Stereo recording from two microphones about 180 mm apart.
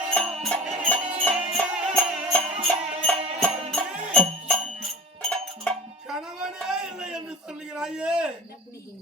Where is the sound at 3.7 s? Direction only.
Centre (ahead or behind).